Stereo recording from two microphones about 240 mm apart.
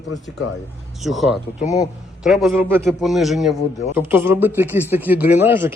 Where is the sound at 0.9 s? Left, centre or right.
Centre.